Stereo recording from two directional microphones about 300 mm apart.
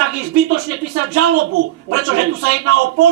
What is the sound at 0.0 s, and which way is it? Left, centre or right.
Speech, right.